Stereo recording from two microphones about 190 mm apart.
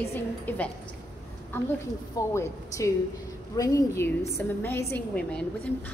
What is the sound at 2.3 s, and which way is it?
A woman's voice, 15° left (ahead or behind).